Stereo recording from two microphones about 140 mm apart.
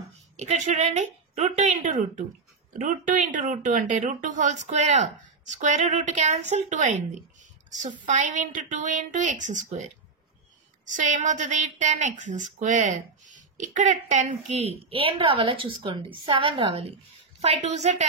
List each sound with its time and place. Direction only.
0.1 s a woman's voice: 55° right (ahead or behind)
10.9 s a woman's voice: 65° right (ahead or behind); by 16.8 s 40° right (ahead or behind)
17.4 s a woman's voice: 50° right (ahead or behind)